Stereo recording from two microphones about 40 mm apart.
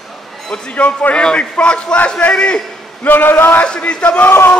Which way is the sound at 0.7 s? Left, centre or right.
Left.